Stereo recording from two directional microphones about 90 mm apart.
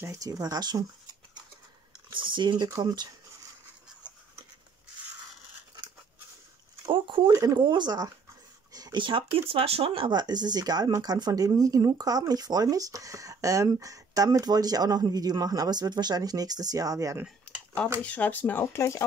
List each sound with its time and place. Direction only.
0.0 s speech: 35° right (ahead or behind)
2.0 s speech: 60° right (ahead or behind)
6.9 s speech: 70° right (ahead or behind)
7.3 s speech: 50° right (ahead or behind)
8.7 s a sound: 45° right (ahead or behind)
9.0 s speech: 75° right (ahead or behind)
10.1 s speech: 50° right (ahead or behind)
17.5 s a sound: 10° left (ahead or behind)
18.0 s speech: 15° left (ahead or behind)